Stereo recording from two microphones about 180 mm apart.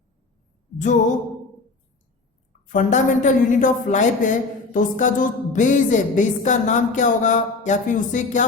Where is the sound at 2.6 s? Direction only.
45° left (ahead or behind).